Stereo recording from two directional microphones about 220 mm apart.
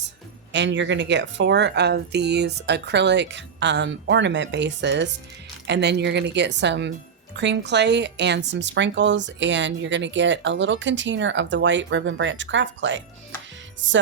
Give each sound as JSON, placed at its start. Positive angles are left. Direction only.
{"t": 0.5, "sound": "speech", "side_deg": -55}